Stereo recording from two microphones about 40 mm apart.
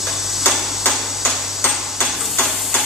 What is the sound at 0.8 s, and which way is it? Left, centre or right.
Hammer, left.